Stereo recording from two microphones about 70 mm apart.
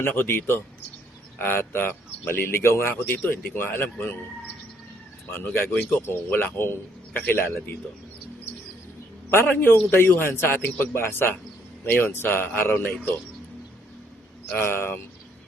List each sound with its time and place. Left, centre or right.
0.0 s speech: left
5.3 s speech: left
9.3 s speech: left
14.5 s speech: left